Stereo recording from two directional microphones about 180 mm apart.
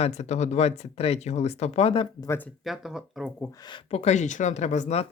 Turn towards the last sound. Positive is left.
turn(degrees=40)  # may be behind; listen again after turning